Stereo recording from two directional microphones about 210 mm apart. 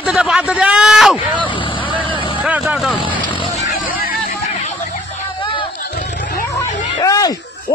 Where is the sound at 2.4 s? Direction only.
5° right (ahead or behind).